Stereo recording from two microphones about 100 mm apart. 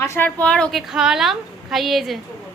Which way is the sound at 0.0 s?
25° left (ahead or behind).